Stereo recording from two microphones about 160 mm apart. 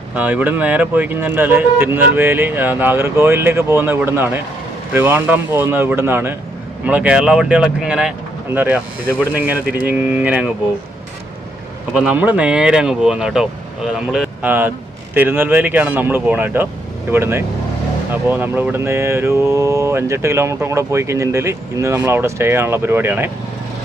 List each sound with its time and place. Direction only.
0.1 s mantra: 10° right (ahead or behind)
11.9 s speech: 10° right (ahead or behind)
15.1 s mantra: 10° right (ahead or behind)